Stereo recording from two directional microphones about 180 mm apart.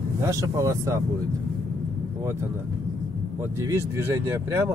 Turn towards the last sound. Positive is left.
turn(degrees=-15)  # may be behind; listen again after turning